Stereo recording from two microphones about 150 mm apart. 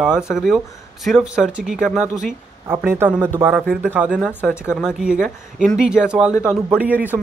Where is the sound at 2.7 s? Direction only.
15° right (ahead or behind).